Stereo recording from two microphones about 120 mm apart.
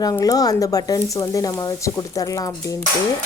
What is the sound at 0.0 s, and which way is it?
A woman's voice, 30° left (ahead or behind).